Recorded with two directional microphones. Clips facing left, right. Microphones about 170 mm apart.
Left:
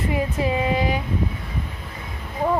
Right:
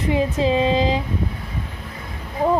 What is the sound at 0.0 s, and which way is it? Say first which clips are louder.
Speech: right 4 dB; 20° right (ahead or behind).